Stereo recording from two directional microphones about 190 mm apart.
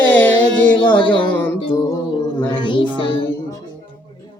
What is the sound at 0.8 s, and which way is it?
Music, 25° left (ahead or behind).